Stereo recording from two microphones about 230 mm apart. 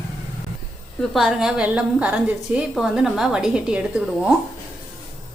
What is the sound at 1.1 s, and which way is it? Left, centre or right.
A woman's voice, centre.